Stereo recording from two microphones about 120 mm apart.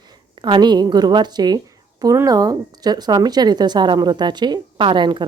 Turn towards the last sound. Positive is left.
turn(degrees=-40)  # may be behind; listen again after turning